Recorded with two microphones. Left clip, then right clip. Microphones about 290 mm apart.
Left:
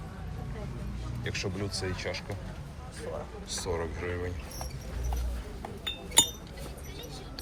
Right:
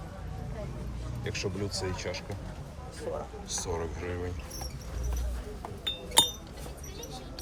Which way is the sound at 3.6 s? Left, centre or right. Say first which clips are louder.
Left 3 dB; centre.